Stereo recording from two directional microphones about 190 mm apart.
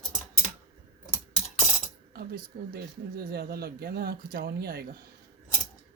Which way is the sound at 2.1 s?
55° right (ahead or behind).